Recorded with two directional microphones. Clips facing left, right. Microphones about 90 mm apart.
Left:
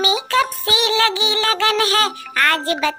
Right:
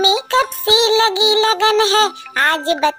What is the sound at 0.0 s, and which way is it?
Music, 25° right (ahead or behind).